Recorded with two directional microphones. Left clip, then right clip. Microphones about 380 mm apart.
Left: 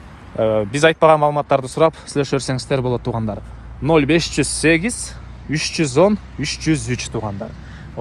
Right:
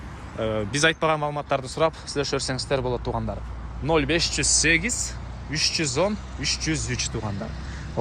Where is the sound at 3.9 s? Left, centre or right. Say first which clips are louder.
Left 7 dB; centre.